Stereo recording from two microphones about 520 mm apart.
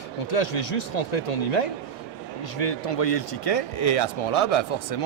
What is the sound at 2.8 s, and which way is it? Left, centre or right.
A man's voice, left.